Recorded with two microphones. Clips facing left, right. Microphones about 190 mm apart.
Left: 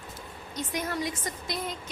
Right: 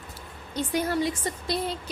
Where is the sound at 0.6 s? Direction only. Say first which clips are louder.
Right 6 dB; 30° right (ahead or behind).